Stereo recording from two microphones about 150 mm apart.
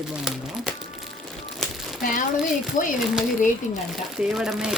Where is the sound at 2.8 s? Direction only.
60° left (ahead or behind).